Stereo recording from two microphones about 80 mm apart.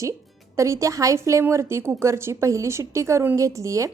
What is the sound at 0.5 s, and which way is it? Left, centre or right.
A woman's voice, right.